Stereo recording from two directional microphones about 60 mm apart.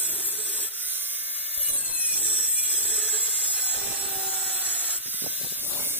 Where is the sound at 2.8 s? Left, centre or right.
Centre.